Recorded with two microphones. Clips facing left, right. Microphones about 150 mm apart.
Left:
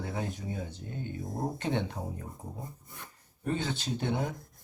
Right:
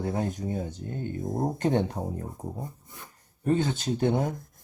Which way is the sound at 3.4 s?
45° right (ahead or behind).